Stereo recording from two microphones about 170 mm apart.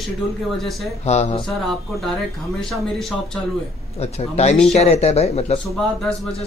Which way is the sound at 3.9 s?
40° left (ahead or behind).